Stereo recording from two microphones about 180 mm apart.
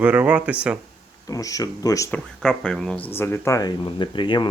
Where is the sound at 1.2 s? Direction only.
20° left (ahead or behind).